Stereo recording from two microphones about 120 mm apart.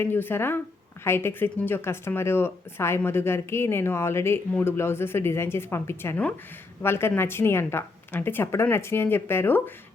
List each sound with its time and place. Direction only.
0.0 s speech: 15° left (ahead or behind)